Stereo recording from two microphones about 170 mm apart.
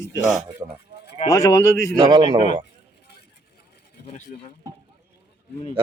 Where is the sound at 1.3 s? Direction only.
20° left (ahead or behind).